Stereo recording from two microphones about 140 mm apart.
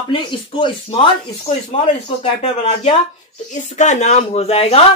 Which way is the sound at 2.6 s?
50° left (ahead or behind).